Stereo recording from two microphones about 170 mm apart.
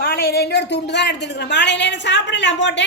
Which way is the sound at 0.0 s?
60° left (ahead or behind).